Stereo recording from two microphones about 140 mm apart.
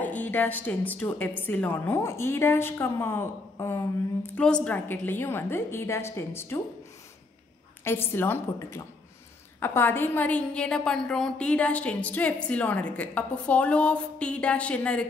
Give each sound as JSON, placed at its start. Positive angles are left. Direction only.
{"t": 0.0, "sound": "a woman's voice", "side_deg": 10}
{"t": 7.8, "sound": "a woman's voice", "side_deg": 15}